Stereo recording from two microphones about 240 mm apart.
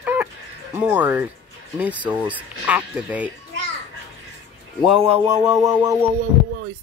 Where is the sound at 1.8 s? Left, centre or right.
Centre.